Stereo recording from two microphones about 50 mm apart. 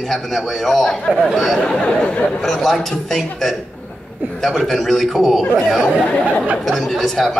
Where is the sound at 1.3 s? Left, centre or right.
Centre; by 2.4 s left.